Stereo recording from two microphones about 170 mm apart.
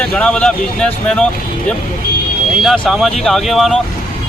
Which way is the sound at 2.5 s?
Centre (ahead or behind).